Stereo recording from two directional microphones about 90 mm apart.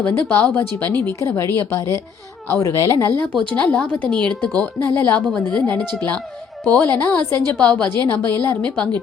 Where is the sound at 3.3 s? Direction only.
15° left (ahead or behind).